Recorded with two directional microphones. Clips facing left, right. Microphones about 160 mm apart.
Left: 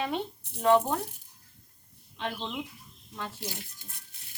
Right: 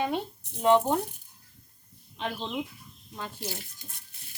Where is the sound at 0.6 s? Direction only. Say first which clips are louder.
Right 1 dB; 20° right (ahead or behind).